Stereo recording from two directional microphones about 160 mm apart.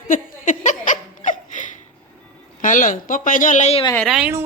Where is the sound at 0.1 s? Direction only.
50° left (ahead or behind).